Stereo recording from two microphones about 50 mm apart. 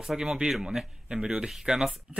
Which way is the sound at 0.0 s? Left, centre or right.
Centre.